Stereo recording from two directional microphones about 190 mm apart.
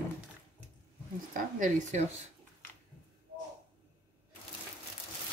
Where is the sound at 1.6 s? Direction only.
40° right (ahead or behind).